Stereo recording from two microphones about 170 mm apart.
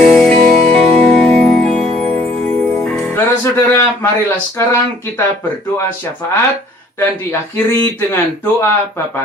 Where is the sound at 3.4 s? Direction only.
15° left (ahead or behind).